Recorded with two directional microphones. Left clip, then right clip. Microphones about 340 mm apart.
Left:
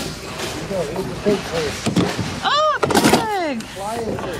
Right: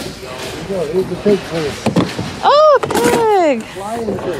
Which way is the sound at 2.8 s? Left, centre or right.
Centre.